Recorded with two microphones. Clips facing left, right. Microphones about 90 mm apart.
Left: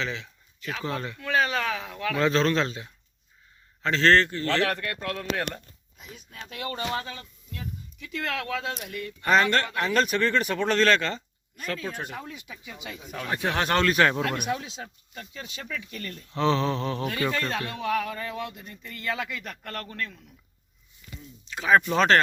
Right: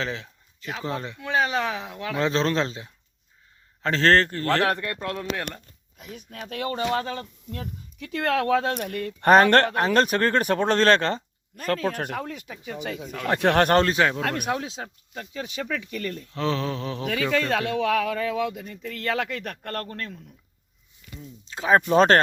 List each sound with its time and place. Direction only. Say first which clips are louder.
0.0 s speech: right 2 dB; 35° right (ahead or behind)
3.8 s speech: right 1 dB; 40° right (ahead or behind)
4.6 s speech: right 3 dB; 25° right (ahead or behind)
5.4 s mantra: left 2 dB; 5° left (ahead or behind)
6.0 s speech: right 5 dB; 65° right (ahead or behind)
6.5 s speech: right 5 dB; 50° right (ahead or behind)
7.6 s speech: right 2 dB; 60° right (ahead or behind); by 16.0 s 90° right
16.3 s mantra: left 3 dB; centre (ahead or behind)
17.3 s speech: right 6 dB; 90° right; by 20.2 s 40° right (ahead or behind)
21.4 s speech: right 1 dB; 30° right (ahead or behind)